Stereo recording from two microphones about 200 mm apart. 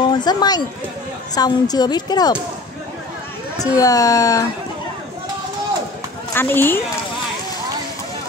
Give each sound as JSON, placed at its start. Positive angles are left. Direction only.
{"t": 0.0, "sound": "a woman's voice", "side_deg": 20}
{"t": 3.7, "sound": "speech", "side_deg": 15}
{"t": 6.3, "sound": "speech", "side_deg": 10}